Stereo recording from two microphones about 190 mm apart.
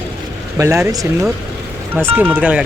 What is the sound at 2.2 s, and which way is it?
Speech, 10° right (ahead or behind).